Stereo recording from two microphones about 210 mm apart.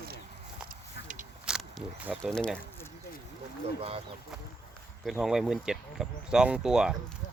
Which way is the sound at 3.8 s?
25° right (ahead or behind).